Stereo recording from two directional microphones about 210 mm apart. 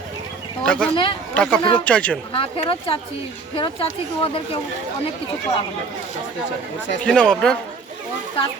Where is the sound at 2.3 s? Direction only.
25° left (ahead or behind).